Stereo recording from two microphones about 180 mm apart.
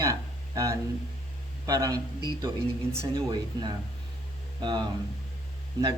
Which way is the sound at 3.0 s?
20° right (ahead or behind).